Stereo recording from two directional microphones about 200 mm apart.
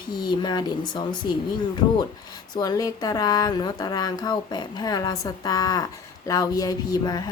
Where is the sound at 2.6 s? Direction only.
20° left (ahead or behind).